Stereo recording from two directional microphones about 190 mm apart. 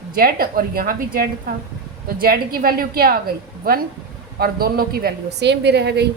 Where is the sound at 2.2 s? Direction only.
50° right (ahead or behind).